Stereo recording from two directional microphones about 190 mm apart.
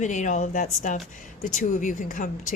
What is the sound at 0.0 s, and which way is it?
A woman's voice, 40° left (ahead or behind).